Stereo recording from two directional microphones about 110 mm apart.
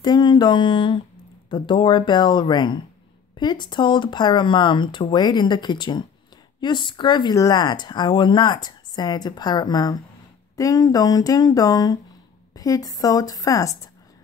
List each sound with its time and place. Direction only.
0.0 s speech: 40° left (ahead or behind)